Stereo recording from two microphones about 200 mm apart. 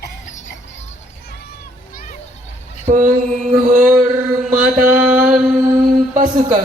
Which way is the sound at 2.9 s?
40° right (ahead or behind).